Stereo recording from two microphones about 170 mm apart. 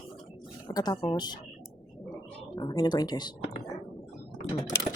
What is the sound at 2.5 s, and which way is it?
Speech, 25° left (ahead or behind).